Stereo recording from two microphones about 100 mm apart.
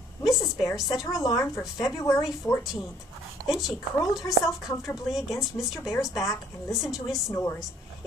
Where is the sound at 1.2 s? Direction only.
35° left (ahead or behind).